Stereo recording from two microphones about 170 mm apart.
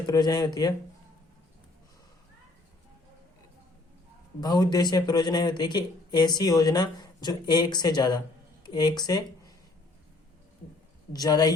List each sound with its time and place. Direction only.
0.1 s speech: 25° left (ahead or behind)
4.4 s speech: 25° left (ahead or behind)
11.1 s speech: 25° left (ahead or behind)